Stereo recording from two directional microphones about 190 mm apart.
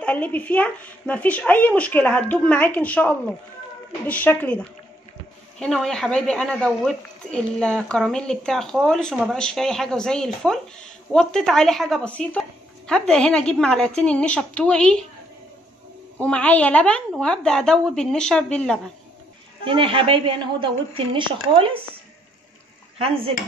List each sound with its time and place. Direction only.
0.0 s speech: 10° left (ahead or behind)
16.2 s speech: 5° left (ahead or behind)
19.6 s a woman's voice: 25° right (ahead or behind)